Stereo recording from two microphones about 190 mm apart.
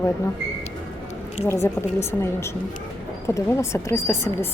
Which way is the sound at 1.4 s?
15° left (ahead or behind).